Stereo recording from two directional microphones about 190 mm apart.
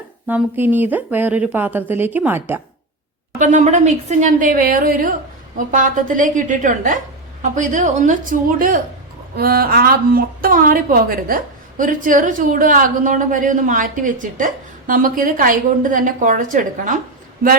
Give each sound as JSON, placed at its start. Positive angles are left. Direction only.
{"t": 0.3, "sound": "a woman's voice", "side_deg": -10}
{"t": 3.3, "sound": "a woman's voice", "side_deg": -40}